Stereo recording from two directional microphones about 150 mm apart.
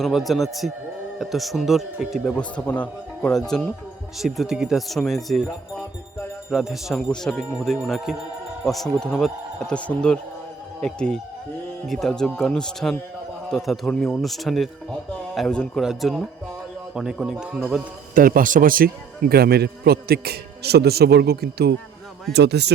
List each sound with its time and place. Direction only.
0.0 s speech: centre (ahead or behind)
18.1 s speech: 70° right (ahead or behind); by 22.7 s 90° right